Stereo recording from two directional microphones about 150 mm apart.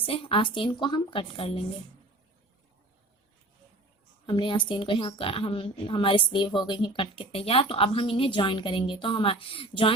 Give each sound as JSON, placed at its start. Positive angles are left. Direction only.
{"t": 0.0, "sound": "a woman's voice", "side_deg": 40}
{"t": 4.3, "sound": "a woman's voice", "side_deg": 30}